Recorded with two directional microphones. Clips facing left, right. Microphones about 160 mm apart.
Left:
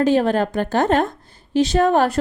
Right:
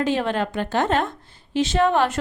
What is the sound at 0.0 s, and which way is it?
A woman's voice, 40° left (ahead or behind).